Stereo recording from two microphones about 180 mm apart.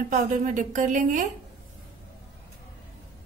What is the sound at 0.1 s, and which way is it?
A woman's voice, 40° right (ahead or behind).